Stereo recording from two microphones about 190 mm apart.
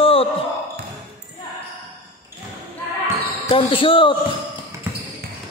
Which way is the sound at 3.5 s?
30° left (ahead or behind).